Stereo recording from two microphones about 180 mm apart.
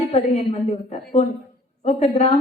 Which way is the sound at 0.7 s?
35° left (ahead or behind).